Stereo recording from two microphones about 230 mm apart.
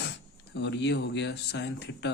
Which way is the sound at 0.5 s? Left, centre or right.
Left.